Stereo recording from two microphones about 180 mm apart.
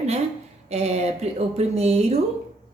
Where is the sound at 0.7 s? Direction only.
35° right (ahead or behind).